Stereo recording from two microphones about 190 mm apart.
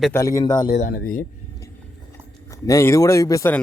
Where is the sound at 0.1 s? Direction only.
15° left (ahead or behind).